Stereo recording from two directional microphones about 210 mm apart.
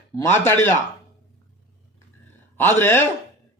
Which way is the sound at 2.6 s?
10° left (ahead or behind).